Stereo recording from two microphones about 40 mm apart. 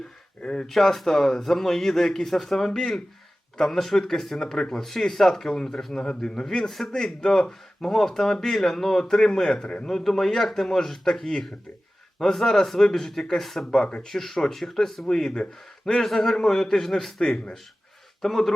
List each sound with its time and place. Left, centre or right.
0.4 s speech: centre
0.7 s speech: centre
6.7 s a man's voice: centre
6.9 s speech: centre
9.8 s speech: centre
13.7 s speech: left
14.1 s speech: centre
18.2 s speech: centre